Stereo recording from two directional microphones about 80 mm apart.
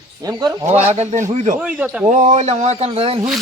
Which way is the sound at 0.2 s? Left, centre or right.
Right.